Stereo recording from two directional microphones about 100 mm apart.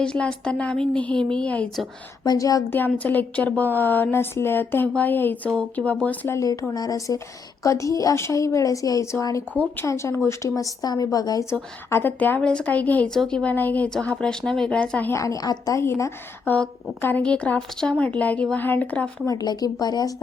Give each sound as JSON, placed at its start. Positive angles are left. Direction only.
{"t": 0.0, "sound": "a woman's voice", "side_deg": 10}
{"t": 2.2, "sound": "a woman's voice", "side_deg": 40}
{"t": 2.6, "sound": "a woman's voice", "side_deg": 20}
{"t": 6.3, "sound": "a woman's voice", "side_deg": 30}
{"t": 11.9, "sound": "a woman's voice", "side_deg": 20}
{"t": 15.1, "sound": "a woman's voice", "side_deg": 35}
{"t": 19.3, "sound": "a woman's voice", "side_deg": 40}